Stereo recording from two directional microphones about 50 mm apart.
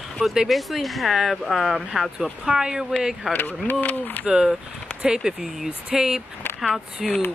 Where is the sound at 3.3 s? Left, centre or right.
Left.